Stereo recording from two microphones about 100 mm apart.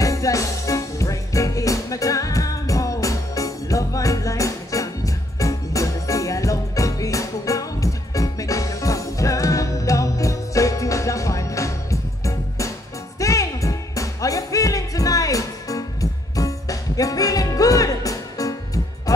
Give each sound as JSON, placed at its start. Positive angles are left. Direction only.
{"t": 0.0, "sound": "music", "side_deg": 35}